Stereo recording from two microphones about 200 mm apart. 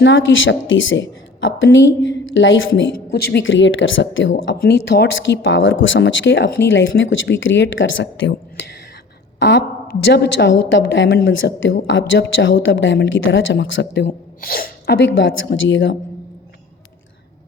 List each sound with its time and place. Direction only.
0.0 s a woman's voice: 70° left (ahead or behind)
4.6 s a woman's voice: 55° left (ahead or behind)
9.4 s a woman's voice: 60° left (ahead or behind)